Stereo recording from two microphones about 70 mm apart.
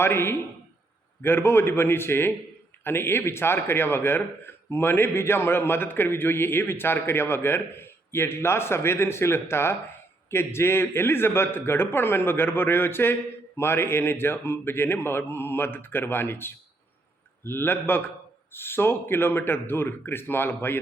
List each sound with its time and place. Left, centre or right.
0.0 s speech: left